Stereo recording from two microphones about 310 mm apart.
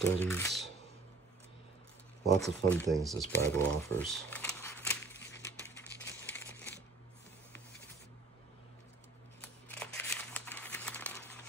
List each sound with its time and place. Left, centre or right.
0.2 s speech: centre
2.4 s speech: centre
5.2 s crumpling: left
5.6 s crumpling: centre
9.4 s a sound: centre